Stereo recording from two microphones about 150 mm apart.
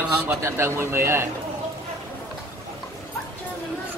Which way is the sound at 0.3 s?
15° right (ahead or behind).